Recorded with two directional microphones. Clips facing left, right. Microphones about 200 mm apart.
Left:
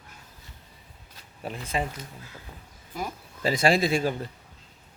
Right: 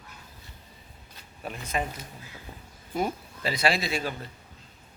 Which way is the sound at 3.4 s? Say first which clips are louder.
Left 5 dB; 45° left (ahead or behind).